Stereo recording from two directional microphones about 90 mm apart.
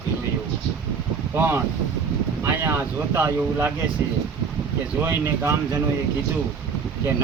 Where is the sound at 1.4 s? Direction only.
25° right (ahead or behind).